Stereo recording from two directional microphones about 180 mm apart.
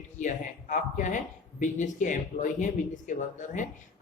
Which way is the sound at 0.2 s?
40° left (ahead or behind).